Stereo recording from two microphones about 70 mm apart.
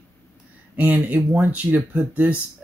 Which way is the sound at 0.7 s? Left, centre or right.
Right.